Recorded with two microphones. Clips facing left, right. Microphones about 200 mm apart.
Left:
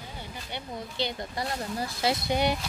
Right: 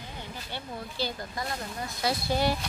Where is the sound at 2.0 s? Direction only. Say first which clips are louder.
Left 1 dB; 20° left (ahead or behind).